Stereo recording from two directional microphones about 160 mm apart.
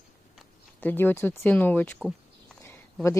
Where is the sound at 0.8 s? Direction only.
10° left (ahead or behind).